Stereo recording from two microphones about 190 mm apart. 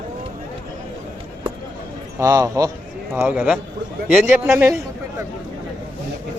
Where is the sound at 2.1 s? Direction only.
20° right (ahead or behind).